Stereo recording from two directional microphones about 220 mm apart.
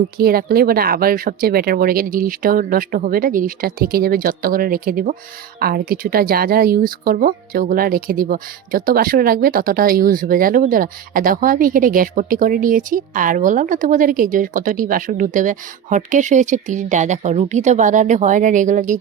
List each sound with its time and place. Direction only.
0.2 s speech: 45° right (ahead or behind)